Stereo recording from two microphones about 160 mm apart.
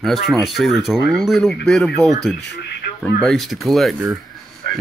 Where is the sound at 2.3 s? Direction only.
90° left.